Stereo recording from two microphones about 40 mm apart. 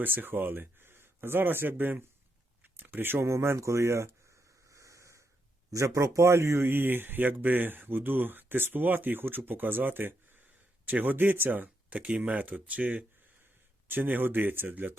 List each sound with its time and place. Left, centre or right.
0.0 s speech: right
6.2 s speech: right
10.8 s speech: right
11.9 s speech: right
13.8 s speech: right